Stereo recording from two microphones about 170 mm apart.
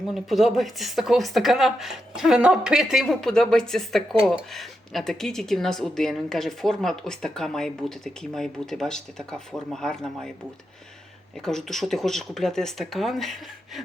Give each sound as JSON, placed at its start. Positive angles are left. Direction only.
{"t": 0.1, "sound": "speech", "side_deg": 0}
{"t": 11.3, "sound": "speech", "side_deg": 0}